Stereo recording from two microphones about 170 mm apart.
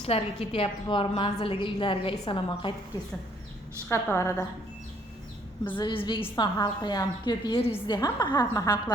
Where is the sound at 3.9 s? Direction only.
15° left (ahead or behind).